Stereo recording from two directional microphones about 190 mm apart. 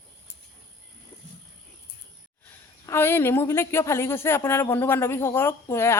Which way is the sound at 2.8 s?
10° left (ahead or behind).